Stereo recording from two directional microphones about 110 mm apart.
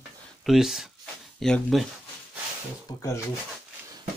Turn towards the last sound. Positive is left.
turn(degrees=35)  # may be behind; listen again after turning